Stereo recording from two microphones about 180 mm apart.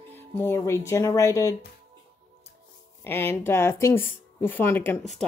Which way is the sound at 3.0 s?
10° left (ahead or behind).